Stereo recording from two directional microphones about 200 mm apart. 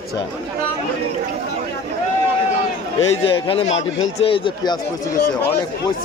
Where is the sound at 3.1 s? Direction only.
30° left (ahead or behind).